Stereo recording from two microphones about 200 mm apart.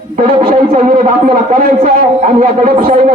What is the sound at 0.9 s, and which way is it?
A man's voice, 45° right (ahead or behind).